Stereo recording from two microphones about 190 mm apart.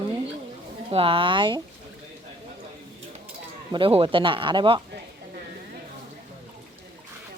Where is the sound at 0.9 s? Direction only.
30° right (ahead or behind).